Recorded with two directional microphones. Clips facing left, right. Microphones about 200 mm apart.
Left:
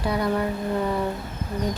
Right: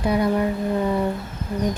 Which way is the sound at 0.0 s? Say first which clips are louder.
Right 4 dB; 20° right (ahead or behind).